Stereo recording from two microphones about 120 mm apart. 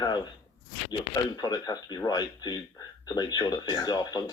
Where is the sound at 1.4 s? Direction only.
35° left (ahead or behind).